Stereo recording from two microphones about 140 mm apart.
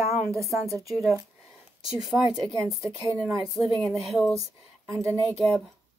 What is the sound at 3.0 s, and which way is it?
Speech, 20° right (ahead or behind).